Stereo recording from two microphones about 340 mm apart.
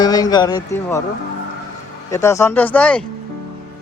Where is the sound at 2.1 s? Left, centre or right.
Centre.